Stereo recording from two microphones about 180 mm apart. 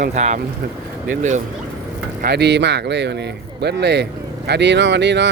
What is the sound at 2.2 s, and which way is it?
Speech, 65° right (ahead or behind).